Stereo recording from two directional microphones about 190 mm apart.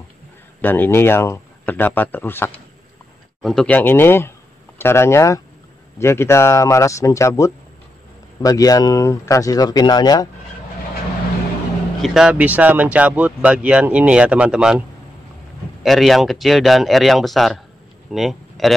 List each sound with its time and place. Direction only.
0.6 s speech: 10° left (ahead or behind)
12.0 s speech: centre (ahead or behind)
15.8 s speech: centre (ahead or behind)